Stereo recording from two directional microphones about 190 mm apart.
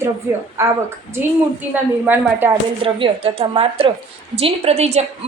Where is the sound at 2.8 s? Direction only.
30° right (ahead or behind).